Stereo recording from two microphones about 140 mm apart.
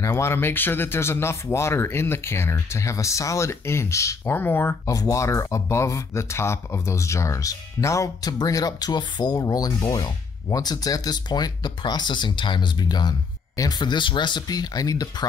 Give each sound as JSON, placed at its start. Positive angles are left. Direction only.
{"t": 0.0, "sound": "speech", "side_deg": 20}